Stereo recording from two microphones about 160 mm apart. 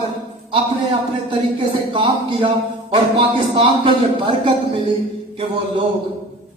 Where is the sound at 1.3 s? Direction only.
30° right (ahead or behind).